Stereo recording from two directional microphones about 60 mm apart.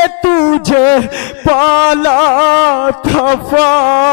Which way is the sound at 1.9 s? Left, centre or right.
Left.